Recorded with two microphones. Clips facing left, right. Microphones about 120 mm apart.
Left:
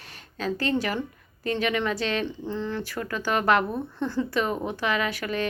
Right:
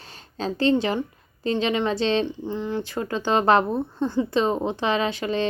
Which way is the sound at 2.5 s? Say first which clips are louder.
Right 3 dB; 15° right (ahead or behind).